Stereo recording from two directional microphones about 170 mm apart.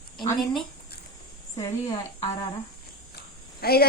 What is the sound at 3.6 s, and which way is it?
Speech, 65° left (ahead or behind).